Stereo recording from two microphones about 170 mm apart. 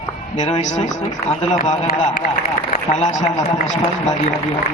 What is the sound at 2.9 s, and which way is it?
A man's voice, 45° left (ahead or behind).